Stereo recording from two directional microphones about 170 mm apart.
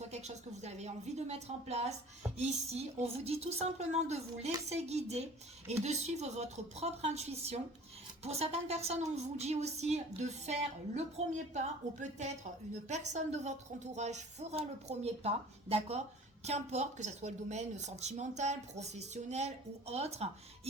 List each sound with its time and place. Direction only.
0.1 s a woman's voice: 40° right (ahead or behind)